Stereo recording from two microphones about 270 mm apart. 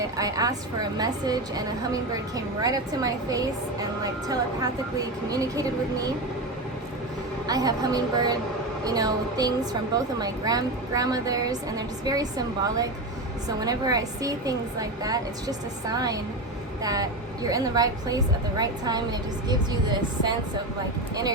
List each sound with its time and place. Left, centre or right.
0.2 s a woman's voice: centre
7.4 s a woman's voice: centre